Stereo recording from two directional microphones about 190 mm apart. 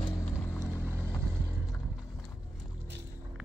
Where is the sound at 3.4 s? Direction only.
5° right (ahead or behind).